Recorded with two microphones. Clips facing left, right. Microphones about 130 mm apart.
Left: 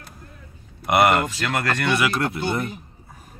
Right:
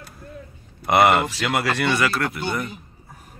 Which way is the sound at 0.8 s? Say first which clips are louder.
Right 1 dB; centre (ahead or behind).